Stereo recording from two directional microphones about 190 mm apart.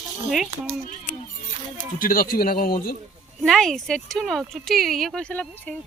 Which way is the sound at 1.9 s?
50° left (ahead or behind).